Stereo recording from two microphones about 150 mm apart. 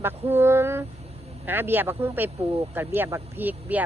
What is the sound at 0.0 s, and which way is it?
Speech, 15° right (ahead or behind).